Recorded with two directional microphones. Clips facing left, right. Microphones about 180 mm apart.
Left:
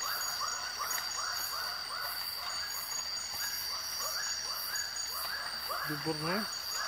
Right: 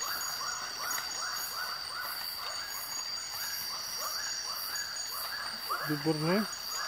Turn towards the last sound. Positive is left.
turn(degrees=-25)  # may be behind; listen again after turning